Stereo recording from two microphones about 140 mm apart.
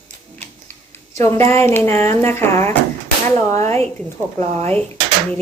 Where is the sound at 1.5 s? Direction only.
15° left (ahead or behind).